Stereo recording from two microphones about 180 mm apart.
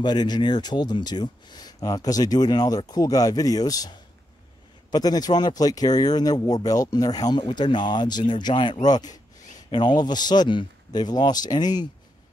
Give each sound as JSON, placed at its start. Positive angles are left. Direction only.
{"t": 0.0, "sound": "speech", "side_deg": 25}
{"t": 4.9, "sound": "speech", "side_deg": 20}